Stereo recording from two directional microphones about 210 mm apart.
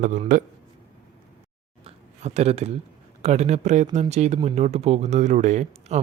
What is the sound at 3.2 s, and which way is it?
Speech, 30° right (ahead or behind).